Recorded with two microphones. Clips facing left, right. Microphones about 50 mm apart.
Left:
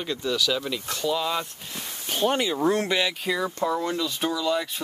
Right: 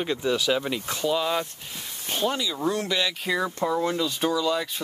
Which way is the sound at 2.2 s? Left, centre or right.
Left.